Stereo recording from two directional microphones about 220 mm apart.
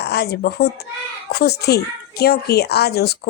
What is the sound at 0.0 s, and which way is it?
A child's voice, 50° left (ahead or behind).